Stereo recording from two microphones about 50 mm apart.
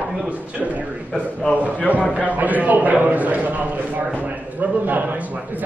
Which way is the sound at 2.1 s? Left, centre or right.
Right.